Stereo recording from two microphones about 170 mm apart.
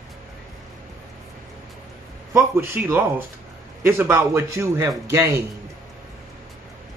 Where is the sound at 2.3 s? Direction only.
15° right (ahead or behind).